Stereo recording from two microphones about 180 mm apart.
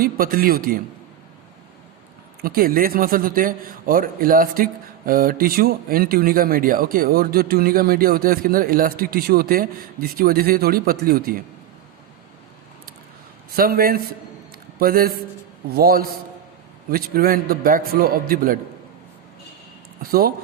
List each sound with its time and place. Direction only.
0.0 s a man's voice: 55° right (ahead or behind)
2.4 s a man's voice: 55° right (ahead or behind)
13.5 s a man's voice: 55° right (ahead or behind)
20.0 s a man's voice: 55° right (ahead or behind)